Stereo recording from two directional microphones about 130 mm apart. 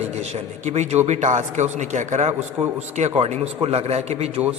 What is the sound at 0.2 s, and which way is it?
A man's voice, 55° right (ahead or behind).